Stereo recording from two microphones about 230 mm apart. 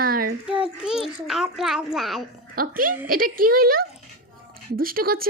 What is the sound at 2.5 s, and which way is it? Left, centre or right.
A woman's voice, right.